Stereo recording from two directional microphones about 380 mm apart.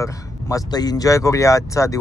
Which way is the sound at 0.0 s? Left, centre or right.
Centre.